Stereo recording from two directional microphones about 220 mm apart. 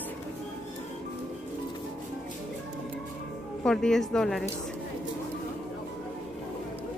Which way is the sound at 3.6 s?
Centre (ahead or behind).